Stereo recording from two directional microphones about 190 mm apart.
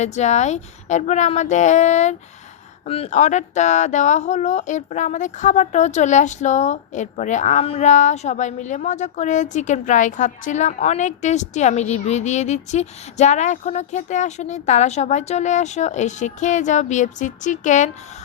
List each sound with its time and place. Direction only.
0.0 s speech: 35° left (ahead or behind)